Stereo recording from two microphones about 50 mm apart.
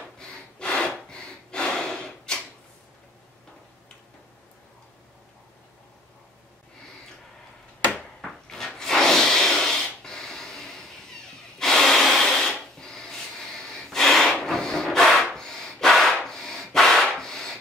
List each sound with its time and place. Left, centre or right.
0.2 s snort: centre
7.9 s drawer open or close: centre
11.5 s a sound: centre